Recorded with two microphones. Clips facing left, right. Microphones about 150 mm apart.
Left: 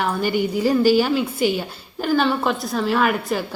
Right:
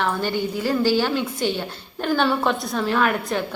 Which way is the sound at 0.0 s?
10° left (ahead or behind).